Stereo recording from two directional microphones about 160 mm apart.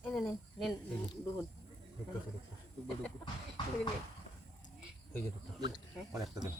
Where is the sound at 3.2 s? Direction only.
30° left (ahead or behind).